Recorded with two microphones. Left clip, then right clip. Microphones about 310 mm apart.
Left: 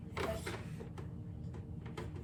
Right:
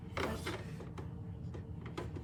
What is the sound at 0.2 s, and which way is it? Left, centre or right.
Mechanisms, centre.